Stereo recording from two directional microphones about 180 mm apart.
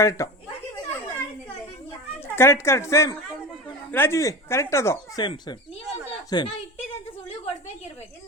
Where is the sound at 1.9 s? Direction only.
15° left (ahead or behind).